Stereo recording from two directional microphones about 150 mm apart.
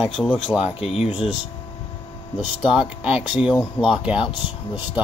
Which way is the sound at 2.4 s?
10° right (ahead or behind).